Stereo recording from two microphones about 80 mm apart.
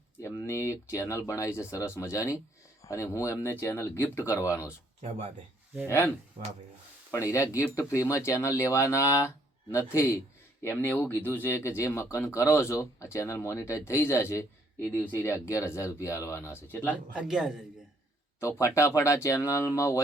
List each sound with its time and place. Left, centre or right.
0.4 s speech: left
3.5 s speech: left
7.1 s speech: left
14.9 s speech: left
16.6 s speech: left
17.2 s a man's voice: centre
18.6 s speech: left